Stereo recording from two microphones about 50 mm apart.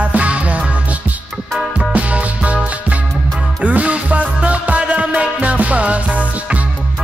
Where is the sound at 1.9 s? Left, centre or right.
Right.